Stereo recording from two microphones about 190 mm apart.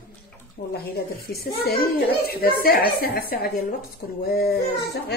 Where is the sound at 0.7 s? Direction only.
55° left (ahead or behind).